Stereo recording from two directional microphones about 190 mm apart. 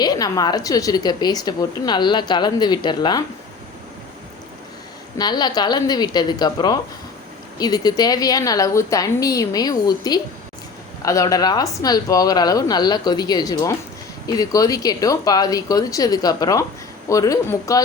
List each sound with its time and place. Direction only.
0.0 s a woman's voice: 20° left (ahead or behind)
5.1 s a woman's voice: 20° left (ahead or behind)